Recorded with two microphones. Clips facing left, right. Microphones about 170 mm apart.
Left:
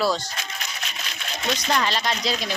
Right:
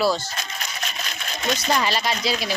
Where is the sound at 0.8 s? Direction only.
45° right (ahead or behind).